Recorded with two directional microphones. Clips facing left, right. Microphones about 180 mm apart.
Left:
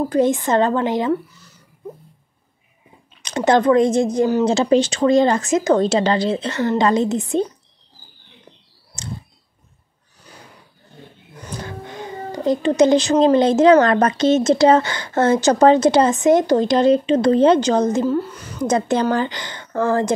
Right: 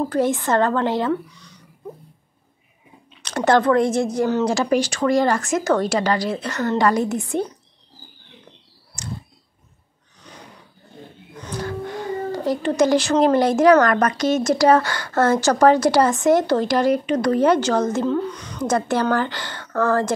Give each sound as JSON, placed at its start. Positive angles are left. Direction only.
{"t": 0.0, "sound": "a woman's voice", "side_deg": 15}
{"t": 1.1, "sound": "speech", "side_deg": 5}
{"t": 3.2, "sound": "a woman's voice", "side_deg": 15}
{"t": 9.0, "sound": "a sound", "side_deg": 25}
{"t": 11.6, "sound": "speech", "side_deg": 20}
{"t": 18.0, "sound": "a woman's voice", "side_deg": 5}
{"t": 18.6, "sound": "a woman's voice", "side_deg": 20}